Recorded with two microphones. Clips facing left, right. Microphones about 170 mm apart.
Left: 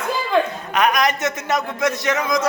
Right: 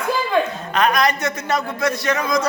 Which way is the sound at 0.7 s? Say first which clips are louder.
Even; 15° left (ahead or behind).